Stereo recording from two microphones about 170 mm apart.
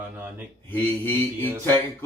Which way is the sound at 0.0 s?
10° right (ahead or behind).